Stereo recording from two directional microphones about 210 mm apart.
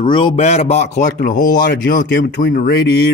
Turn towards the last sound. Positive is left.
turn(degrees=55)  # may be behind; listen again after turning